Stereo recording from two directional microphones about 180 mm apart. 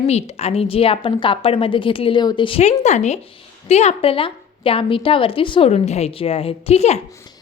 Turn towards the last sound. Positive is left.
turn(degrees=35)  # may be behind; listen again after turning